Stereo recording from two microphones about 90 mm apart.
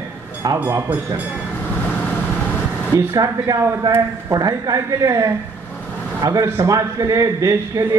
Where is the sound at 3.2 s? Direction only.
35° right (ahead or behind).